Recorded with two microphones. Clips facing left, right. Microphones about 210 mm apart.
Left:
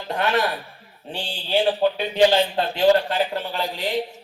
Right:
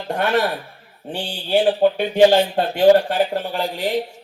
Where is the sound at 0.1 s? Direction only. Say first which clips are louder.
Right 3 dB; 50° right (ahead or behind).